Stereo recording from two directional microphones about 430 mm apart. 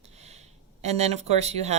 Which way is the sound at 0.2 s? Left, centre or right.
Centre.